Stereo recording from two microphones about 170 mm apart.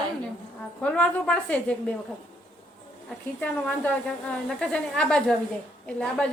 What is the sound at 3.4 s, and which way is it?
A woman's voice, 10° left (ahead or behind).